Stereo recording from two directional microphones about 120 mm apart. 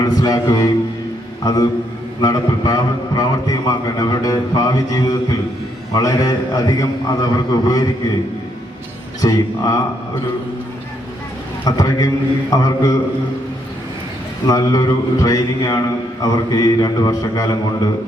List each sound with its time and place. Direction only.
0.0 s a man's voice: 30° left (ahead or behind)
2.2 s a man's voice: 30° left (ahead or behind)
9.2 s a man's voice: 30° left (ahead or behind)
11.6 s a man's voice: 30° left (ahead or behind)
14.4 s a man's voice: 30° left (ahead or behind)